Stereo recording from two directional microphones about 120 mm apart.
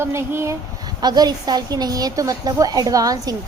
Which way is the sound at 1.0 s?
35° right (ahead or behind).